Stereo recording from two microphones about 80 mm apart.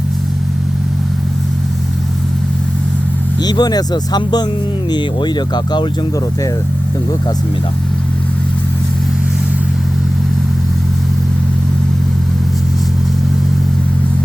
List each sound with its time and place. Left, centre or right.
3.4 s speech: left